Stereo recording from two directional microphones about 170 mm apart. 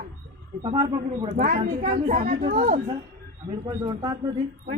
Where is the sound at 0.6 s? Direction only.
35° right (ahead or behind).